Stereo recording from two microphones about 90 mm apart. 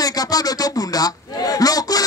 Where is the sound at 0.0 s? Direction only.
45° left (ahead or behind).